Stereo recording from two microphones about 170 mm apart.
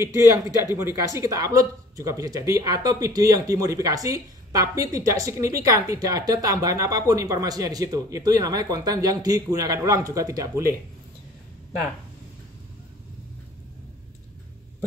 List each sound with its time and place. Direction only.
0.6 s speech: 15° right (ahead or behind)